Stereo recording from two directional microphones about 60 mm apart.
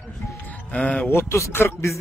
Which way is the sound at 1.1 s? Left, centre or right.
Left.